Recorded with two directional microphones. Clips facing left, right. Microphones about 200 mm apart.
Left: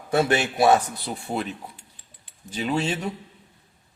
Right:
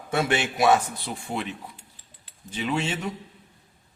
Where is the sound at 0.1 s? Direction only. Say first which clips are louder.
Left 3 dB; 40° left (ahead or behind).